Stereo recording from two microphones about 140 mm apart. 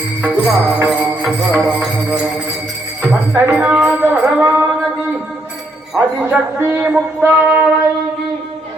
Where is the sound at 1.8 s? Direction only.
5° right (ahead or behind).